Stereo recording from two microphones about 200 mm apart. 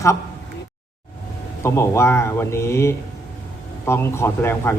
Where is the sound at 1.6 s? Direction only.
15° left (ahead or behind).